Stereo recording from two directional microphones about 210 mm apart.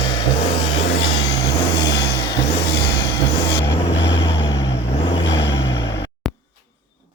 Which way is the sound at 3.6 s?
55° left (ahead or behind).